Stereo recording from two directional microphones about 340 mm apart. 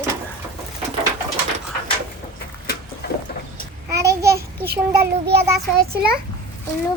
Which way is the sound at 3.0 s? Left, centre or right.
Left.